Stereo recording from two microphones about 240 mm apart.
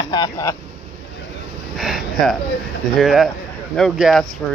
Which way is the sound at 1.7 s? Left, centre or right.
Centre.